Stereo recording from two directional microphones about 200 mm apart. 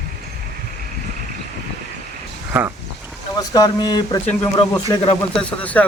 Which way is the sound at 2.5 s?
10° right (ahead or behind).